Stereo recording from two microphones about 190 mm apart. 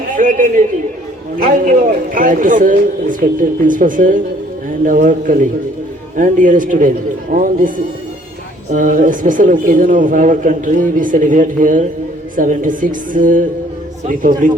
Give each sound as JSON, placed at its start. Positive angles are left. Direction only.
{"t": 0.1, "sound": "a sound", "side_deg": -45}
{"t": 1.5, "sound": "speech", "side_deg": -45}
{"t": 8.7, "sound": "speech", "side_deg": -45}